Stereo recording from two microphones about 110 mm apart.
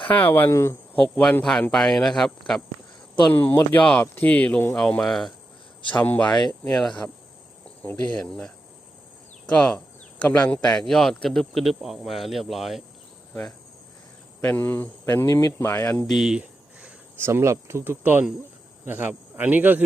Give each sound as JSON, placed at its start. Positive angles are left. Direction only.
{"t": 0.1, "sound": "speech", "side_deg": 15}
{"t": 0.9, "sound": "speech", "side_deg": 10}
{"t": 3.3, "sound": "speech", "side_deg": 20}
{"t": 5.9, "sound": "speech", "side_deg": 15}
{"t": 6.7, "sound": "speech", "side_deg": 5}
{"t": 14.4, "sound": "speech", "side_deg": 15}
{"t": 16.1, "sound": "a sound", "side_deg": -5}
{"t": 17.2, "sound": "speech", "side_deg": -20}